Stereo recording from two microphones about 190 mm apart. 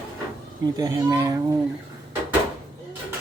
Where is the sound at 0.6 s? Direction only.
20° right (ahead or behind).